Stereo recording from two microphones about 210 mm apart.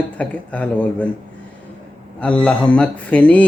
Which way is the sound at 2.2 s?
5° left (ahead or behind).